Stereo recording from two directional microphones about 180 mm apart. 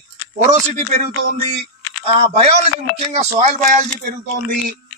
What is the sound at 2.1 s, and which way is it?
Speech, 35° right (ahead or behind).